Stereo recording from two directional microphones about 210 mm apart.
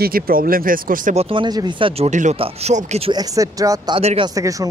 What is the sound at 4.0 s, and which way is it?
Speech, 30° right (ahead or behind).